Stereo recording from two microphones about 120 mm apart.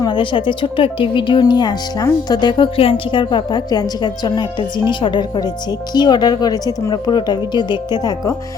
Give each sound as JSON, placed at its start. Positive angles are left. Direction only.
{"t": 0.0, "sound": "speech", "side_deg": 40}